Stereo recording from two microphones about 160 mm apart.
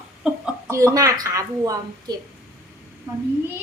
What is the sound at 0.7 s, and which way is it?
Speech, 20° right (ahead or behind).